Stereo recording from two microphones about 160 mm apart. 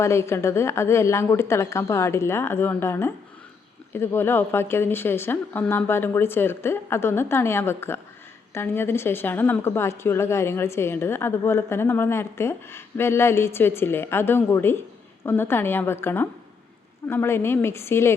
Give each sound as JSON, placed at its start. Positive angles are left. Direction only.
{"t": 0.0, "sound": "a woman's voice", "side_deg": 15}